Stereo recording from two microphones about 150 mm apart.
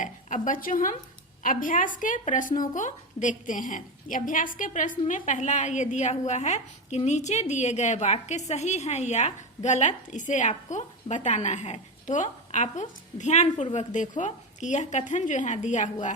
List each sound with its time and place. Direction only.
0.0 s a woman's voice: 60° left (ahead or behind)